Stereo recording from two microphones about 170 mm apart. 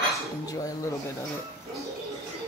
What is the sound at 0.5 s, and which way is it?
Speech, 20° left (ahead or behind).